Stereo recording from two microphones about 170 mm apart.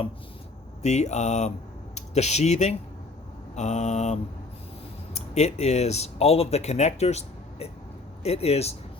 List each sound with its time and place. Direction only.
0.8 s speech: 40° left (ahead or behind)